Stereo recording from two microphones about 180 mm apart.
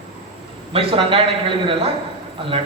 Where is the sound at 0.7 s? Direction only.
30° right (ahead or behind).